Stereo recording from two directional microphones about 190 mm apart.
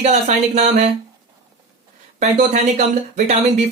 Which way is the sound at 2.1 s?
40° right (ahead or behind).